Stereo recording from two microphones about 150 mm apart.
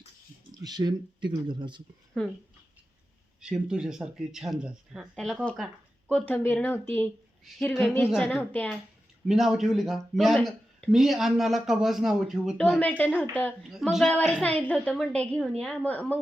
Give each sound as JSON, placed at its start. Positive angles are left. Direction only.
{"t": 0.5, "sound": "speech", "side_deg": -25}
{"t": 2.2, "sound": "speech", "side_deg": 5}
{"t": 3.4, "sound": "speech", "side_deg": -5}
{"t": 9.2, "sound": "speech", "side_deg": 0}